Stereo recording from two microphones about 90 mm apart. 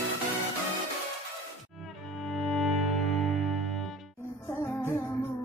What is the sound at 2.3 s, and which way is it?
Music, centre (ahead or behind).